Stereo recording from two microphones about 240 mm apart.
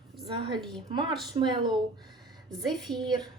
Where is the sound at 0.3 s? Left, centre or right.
Right.